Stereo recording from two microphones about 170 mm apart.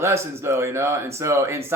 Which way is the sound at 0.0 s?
15° right (ahead or behind).